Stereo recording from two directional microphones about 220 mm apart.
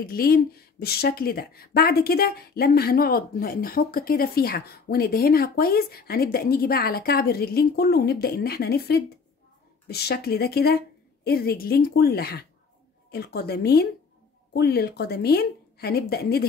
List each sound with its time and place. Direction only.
0.0 s speech: 40° left (ahead or behind)